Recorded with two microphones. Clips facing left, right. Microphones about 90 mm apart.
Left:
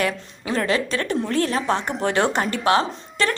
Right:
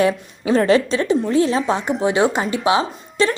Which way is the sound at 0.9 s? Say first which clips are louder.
Right 5 dB; 15° right (ahead or behind).